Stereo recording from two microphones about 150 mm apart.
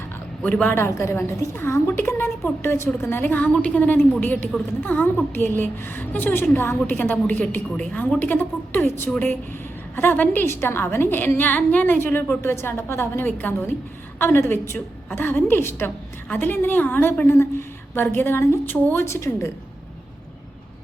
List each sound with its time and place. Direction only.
0.4 s a woman's voice: 10° left (ahead or behind)